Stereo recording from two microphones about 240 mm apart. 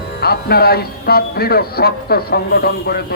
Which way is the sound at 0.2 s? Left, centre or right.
Left.